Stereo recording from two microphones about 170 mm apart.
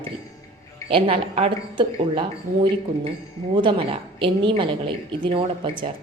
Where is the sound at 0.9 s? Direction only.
30° right (ahead or behind).